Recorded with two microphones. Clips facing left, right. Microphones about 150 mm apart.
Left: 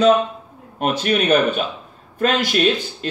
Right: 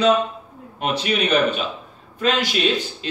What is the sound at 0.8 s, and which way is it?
Speech, 45° left (ahead or behind).